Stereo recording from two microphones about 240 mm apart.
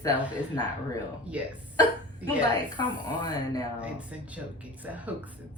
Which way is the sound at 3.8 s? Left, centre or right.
Centre.